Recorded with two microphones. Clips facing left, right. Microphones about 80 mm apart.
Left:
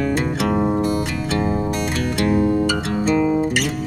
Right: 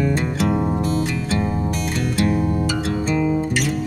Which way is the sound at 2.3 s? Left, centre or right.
Left.